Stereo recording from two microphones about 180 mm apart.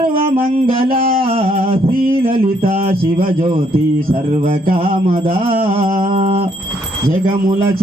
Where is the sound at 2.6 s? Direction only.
30° right (ahead or behind).